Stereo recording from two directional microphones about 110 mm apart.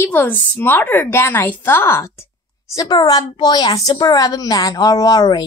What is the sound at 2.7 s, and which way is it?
A woman's voice, 35° left (ahead or behind).